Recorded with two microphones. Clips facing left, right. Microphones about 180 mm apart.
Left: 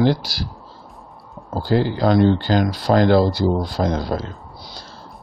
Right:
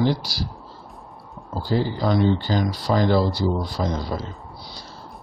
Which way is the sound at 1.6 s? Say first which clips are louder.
Left 4 dB; 70° left (ahead or behind).